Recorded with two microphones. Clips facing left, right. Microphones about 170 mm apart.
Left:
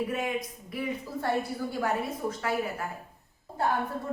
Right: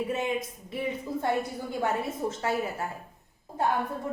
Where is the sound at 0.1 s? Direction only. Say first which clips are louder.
Right 2 dB; 25° right (ahead or behind).